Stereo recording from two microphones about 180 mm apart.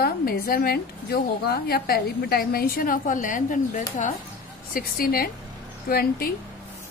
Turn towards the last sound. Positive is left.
turn(degrees=55)  # may be behind; listen again after turning